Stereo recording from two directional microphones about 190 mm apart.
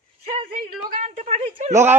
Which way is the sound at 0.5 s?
40° right (ahead or behind).